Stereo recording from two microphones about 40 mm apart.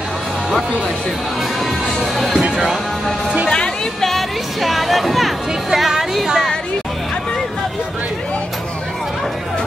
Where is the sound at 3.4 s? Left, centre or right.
Centre.